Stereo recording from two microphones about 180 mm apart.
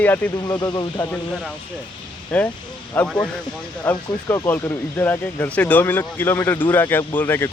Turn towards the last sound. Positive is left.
turn(degrees=10)  # may be behind; listen again after turning